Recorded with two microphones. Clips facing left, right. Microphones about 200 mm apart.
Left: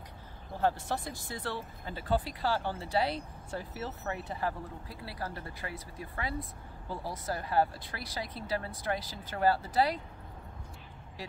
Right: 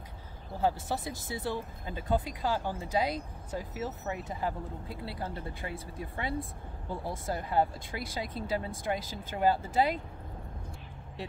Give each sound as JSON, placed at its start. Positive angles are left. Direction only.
{"t": 0.6, "sound": "speech", "side_deg": -10}